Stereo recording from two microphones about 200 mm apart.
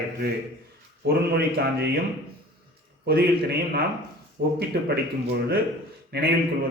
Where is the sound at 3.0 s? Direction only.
50° right (ahead or behind).